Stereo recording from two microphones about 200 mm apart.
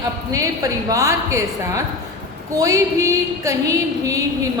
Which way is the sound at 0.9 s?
15° right (ahead or behind).